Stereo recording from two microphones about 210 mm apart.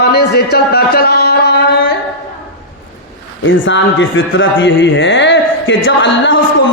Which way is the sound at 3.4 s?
65° left (ahead or behind).